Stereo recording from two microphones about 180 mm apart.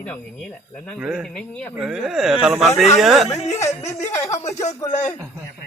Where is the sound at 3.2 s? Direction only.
35° left (ahead or behind).